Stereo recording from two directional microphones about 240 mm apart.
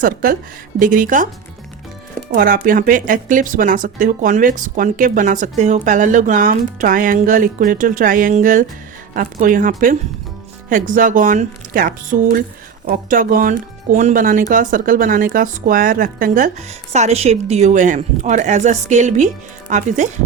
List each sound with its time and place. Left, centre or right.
0.0 s speech: right
2.3 s speech: right